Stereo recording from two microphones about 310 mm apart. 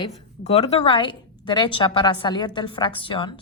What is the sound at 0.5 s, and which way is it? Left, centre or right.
A woman's voice, centre.